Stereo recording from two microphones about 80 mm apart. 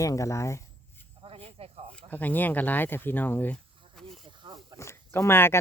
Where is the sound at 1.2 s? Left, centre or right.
Right.